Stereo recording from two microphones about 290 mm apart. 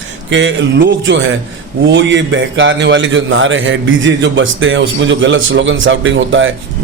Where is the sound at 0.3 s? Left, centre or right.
Right.